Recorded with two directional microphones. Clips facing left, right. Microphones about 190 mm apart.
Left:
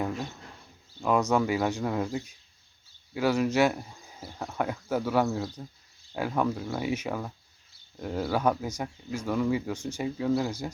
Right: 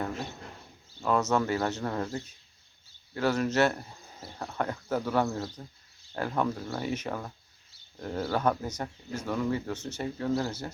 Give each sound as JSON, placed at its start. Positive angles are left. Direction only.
{"t": 1.0, "sound": "speech", "side_deg": 10}